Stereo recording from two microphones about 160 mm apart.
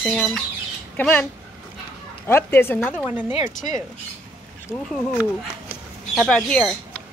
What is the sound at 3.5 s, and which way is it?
Speech, 55° left (ahead or behind).